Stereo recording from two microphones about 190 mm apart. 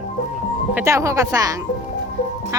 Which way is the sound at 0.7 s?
15° right (ahead or behind).